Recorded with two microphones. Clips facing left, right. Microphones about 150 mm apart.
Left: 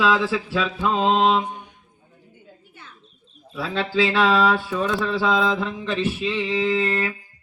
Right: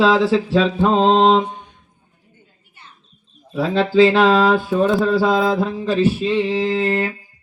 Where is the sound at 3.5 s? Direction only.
45° right (ahead or behind).